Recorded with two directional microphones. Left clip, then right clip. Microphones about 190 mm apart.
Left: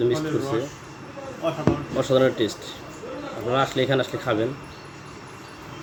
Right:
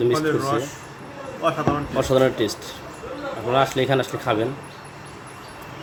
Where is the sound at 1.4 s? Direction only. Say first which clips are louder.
Right 4 dB; 60° right (ahead or behind).